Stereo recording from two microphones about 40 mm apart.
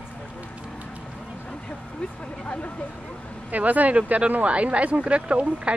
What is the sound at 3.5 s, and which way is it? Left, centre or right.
Speech, right.